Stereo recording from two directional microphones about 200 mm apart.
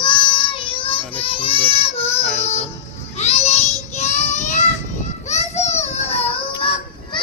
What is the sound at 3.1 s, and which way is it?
Child singing, 35° left (ahead or behind).